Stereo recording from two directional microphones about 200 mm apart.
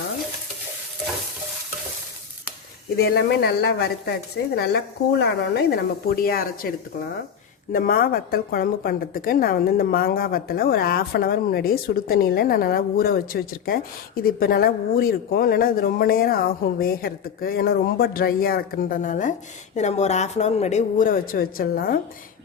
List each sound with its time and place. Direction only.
3.0 s a woman's voice: 55° left (ahead or behind)
7.7 s a woman's voice: 45° left (ahead or behind)